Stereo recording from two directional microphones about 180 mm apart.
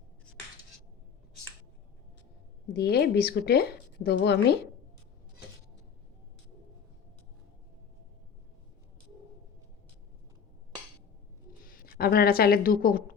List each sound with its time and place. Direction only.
2.7 s a woman's voice: 65° left (ahead or behind)
11.7 s speech: 55° left (ahead or behind)